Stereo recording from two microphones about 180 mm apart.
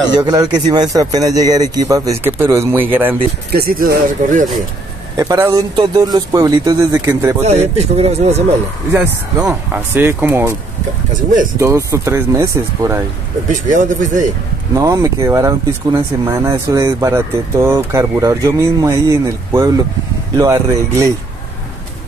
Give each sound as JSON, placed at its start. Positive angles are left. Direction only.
{"t": 0.1, "sound": "speech", "side_deg": -20}
{"t": 3.5, "sound": "speech", "side_deg": -55}
{"t": 5.1, "sound": "speech", "side_deg": -20}
{"t": 7.7, "sound": "speech", "side_deg": -35}
{"t": 8.9, "sound": "speech", "side_deg": -15}
{"t": 11.6, "sound": "speech", "side_deg": -15}
{"t": 13.5, "sound": "speech", "side_deg": -45}
{"t": 14.8, "sound": "speech", "side_deg": -20}